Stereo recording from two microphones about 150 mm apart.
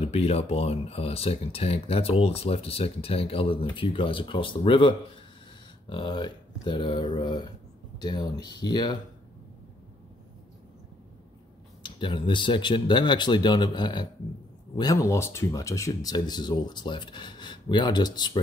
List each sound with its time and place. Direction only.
0.0 s speech: 40° left (ahead or behind)
11.8 s speech: 30° left (ahead or behind)